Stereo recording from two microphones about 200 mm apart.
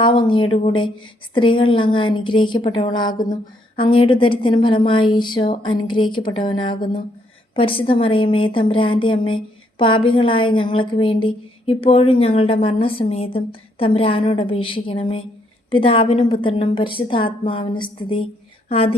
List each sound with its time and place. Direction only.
0.0 s a woman's voice: 25° left (ahead or behind)